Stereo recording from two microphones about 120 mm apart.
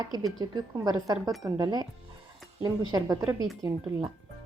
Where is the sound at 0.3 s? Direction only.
35° right (ahead or behind).